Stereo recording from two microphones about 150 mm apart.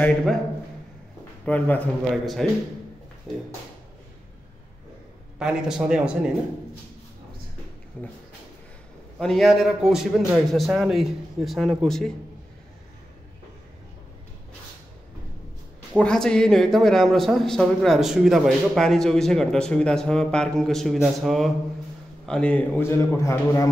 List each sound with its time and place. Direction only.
0.0 s a man's voice: 5° left (ahead or behind)
1.4 s a man's voice: 10° left (ahead or behind)
5.4 s a man's voice: 5° right (ahead or behind)
9.2 s a man's voice: centre (ahead or behind)
16.0 s a man's voice: 5° left (ahead or behind)